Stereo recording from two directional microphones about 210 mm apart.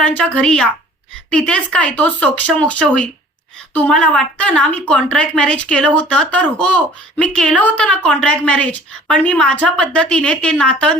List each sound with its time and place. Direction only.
0.0 s a woman's voice: 5° left (ahead or behind)